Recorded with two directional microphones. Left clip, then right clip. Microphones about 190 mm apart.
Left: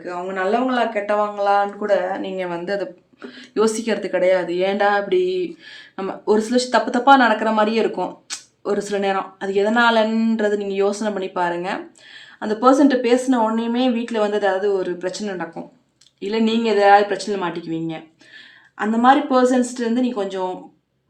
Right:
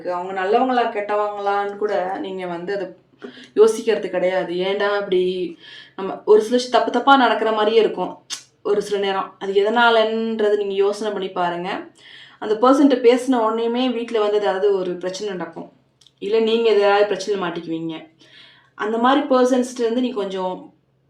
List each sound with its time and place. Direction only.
0.0 s speech: 40° left (ahead or behind)
6.5 s speech: 35° left (ahead or behind)